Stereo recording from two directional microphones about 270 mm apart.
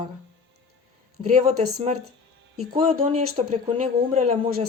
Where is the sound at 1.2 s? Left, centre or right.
Right.